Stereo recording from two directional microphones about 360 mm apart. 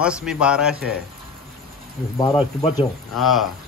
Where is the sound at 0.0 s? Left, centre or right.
Centre.